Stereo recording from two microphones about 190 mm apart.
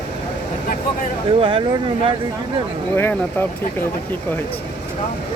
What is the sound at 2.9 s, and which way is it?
Speech, 10° left (ahead or behind).